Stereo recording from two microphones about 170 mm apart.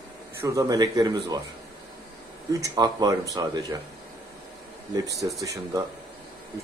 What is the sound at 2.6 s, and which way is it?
Speech, 20° right (ahead or behind).